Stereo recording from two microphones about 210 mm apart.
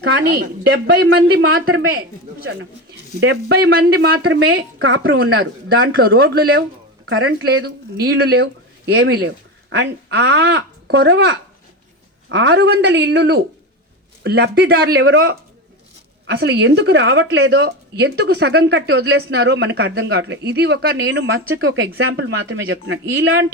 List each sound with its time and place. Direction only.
0.3 s a woman's voice: 50° right (ahead or behind); by 5.9 s 70° right (ahead or behind)
6.0 s a woman's voice: 45° right (ahead or behind)
7.0 s a woman's voice: 85° right
7.6 s a woman's voice: 50° right (ahead or behind)